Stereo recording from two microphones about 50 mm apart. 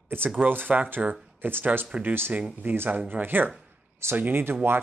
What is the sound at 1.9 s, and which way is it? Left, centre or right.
Speech, right.